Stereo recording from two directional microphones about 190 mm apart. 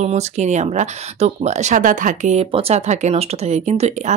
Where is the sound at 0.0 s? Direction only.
35° right (ahead or behind).